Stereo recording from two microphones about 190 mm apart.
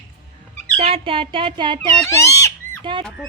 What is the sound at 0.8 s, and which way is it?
Speech, 30° right (ahead or behind).